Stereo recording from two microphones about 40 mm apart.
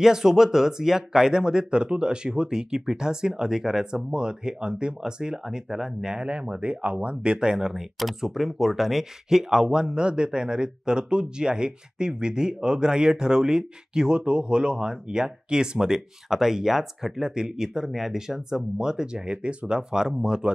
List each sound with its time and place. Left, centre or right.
0.0 s speech: centre
6.0 s speech: right
7.7 s speech: centre